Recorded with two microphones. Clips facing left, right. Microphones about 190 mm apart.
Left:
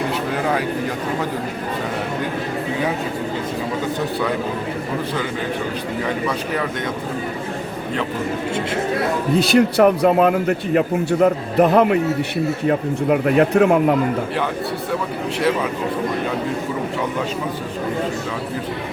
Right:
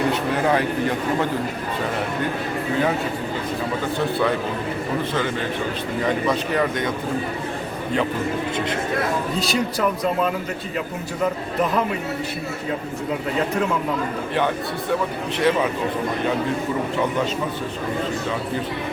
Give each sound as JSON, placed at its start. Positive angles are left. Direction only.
{"t": 9.4, "sound": "speech", "side_deg": 65}